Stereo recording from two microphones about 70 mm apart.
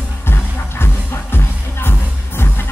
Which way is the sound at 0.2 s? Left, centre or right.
Left.